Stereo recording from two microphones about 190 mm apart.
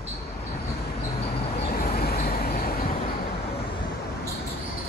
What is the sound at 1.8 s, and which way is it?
Vehicle, 50° left (ahead or behind).